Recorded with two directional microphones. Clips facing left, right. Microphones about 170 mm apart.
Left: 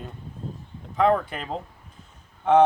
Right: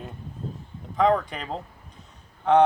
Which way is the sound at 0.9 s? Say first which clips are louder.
Even; centre (ahead or behind).